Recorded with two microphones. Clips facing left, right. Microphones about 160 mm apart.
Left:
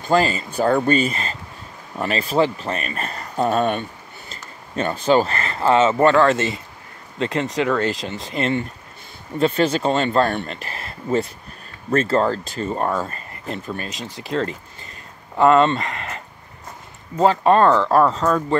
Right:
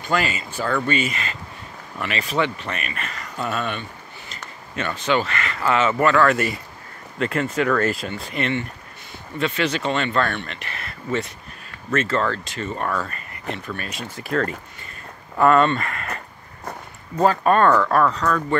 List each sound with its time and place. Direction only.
0.1 s speech: 35° left (ahead or behind)
15.3 s speech: 20° left (ahead or behind)
17.2 s speech: 25° left (ahead or behind)